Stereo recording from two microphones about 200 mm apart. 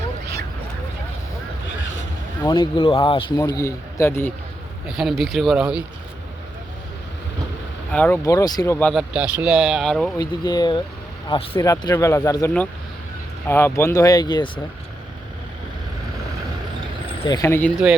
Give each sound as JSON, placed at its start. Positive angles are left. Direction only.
{"t": 2.4, "sound": "a man's voice", "side_deg": 20}
{"t": 4.9, "sound": "speech", "side_deg": 0}
{"t": 7.9, "sound": "a man's voice", "side_deg": 10}
{"t": 8.9, "sound": "speech", "side_deg": -5}
{"t": 10.2, "sound": "a man's voice", "side_deg": 20}
{"t": 13.5, "sound": "a man's voice", "side_deg": 10}
{"t": 17.2, "sound": "a man's voice", "side_deg": 15}